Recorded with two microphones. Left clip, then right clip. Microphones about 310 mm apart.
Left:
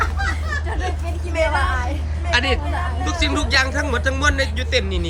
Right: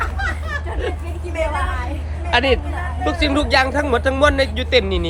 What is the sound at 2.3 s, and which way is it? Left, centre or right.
A woman's voice, centre.